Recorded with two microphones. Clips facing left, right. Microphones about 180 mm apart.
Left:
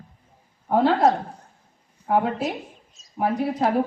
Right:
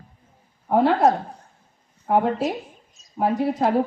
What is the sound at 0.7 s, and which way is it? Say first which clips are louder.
A woman's voice: right 1 dB; 15° right (ahead or behind).